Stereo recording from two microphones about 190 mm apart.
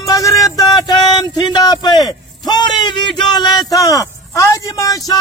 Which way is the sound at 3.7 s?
15° left (ahead or behind).